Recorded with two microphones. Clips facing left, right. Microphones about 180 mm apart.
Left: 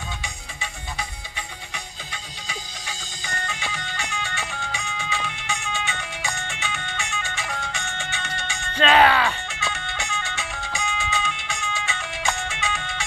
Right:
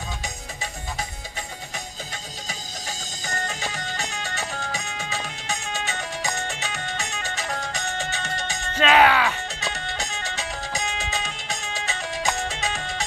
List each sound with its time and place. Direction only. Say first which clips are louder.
0.2 s music: right 2 dB; 40° right (ahead or behind)
2.4 s music: even; 40° right (ahead or behind)
8.7 s music: even; 10° right (ahead or behind)
9.5 s music: even; 35° right (ahead or behind)